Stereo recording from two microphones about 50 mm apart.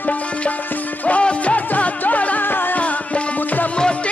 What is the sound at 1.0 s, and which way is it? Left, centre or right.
Music, left.